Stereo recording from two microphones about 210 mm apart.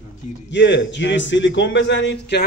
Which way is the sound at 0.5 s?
60° left (ahead or behind).